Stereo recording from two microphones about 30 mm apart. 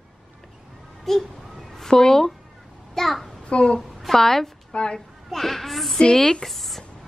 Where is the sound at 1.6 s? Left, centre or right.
Centre.